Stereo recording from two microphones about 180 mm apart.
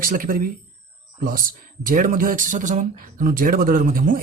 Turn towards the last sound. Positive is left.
turn(degrees=-50)  # may be behind; listen again after turning